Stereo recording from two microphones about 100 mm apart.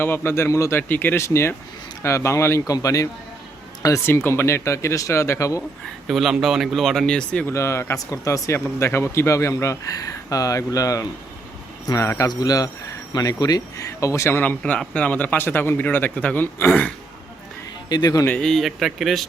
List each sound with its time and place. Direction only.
0.0 s speech: 20° left (ahead or behind)
6.1 s speech: centre (ahead or behind)
7.4 s speech: 30° left (ahead or behind)
14.6 s speech: 10° left (ahead or behind)
17.8 s speech: 40° left (ahead or behind)
18.3 s speech: 5° left (ahead or behind)